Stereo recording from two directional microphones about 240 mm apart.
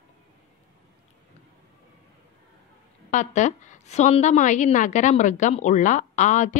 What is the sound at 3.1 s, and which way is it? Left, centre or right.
A woman's voice, left.